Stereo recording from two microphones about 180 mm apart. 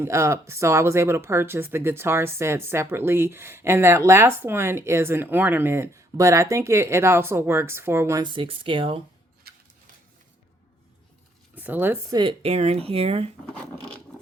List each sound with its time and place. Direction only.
0.0 s speech: 15° right (ahead or behind)
8.2 s speech: 25° right (ahead or behind)
9.5 s a sound: 60° right (ahead or behind)
11.5 s speech: 10° right (ahead or behind)
12.1 s speech: 25° right (ahead or behind)